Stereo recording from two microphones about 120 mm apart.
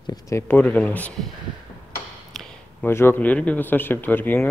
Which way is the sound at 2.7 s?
20° left (ahead or behind).